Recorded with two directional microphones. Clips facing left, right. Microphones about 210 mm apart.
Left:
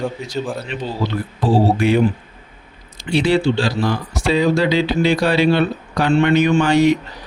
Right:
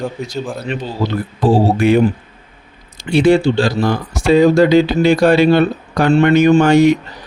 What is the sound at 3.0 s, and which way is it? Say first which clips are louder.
Speech: right 5 dB; 50° right (ahead or behind).